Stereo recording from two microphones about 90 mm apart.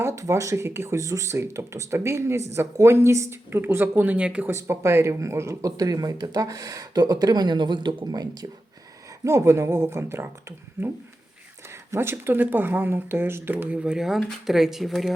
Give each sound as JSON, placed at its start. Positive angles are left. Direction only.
{"t": 0.0, "sound": "speech", "side_deg": -35}
{"t": 4.7, "sound": "speech", "side_deg": -30}
{"t": 9.2, "sound": "speech", "side_deg": -35}
{"t": 11.7, "sound": "speech", "side_deg": -30}